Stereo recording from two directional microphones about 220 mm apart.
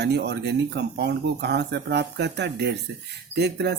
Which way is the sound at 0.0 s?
50° right (ahead or behind).